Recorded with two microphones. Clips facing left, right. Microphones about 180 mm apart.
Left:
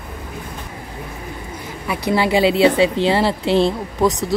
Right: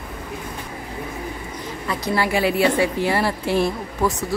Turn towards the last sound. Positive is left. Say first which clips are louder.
# left 4 dB
turn(degrees=20)  # may be behind; listen again after turning